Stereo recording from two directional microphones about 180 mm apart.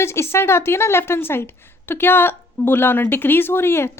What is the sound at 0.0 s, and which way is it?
A woman's voice, 15° left (ahead or behind).